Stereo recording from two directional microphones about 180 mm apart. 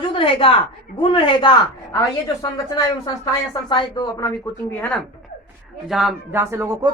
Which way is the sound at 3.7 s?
25° left (ahead or behind).